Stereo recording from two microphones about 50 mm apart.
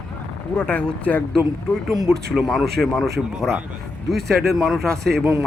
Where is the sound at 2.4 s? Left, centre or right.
Right.